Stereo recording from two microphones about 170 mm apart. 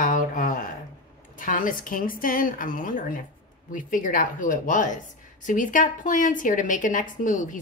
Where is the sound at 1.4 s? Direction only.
50° left (ahead or behind).